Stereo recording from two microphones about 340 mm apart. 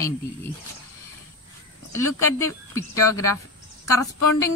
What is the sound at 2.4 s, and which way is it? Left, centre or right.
Speech, centre.